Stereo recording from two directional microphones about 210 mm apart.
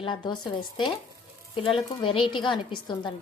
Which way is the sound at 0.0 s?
20° left (ahead or behind).